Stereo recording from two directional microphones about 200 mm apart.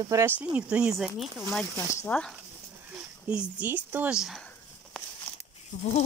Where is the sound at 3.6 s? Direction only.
10° right (ahead or behind).